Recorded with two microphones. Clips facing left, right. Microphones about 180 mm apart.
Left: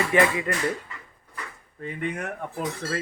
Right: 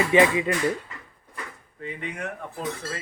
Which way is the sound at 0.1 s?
20° right (ahead or behind).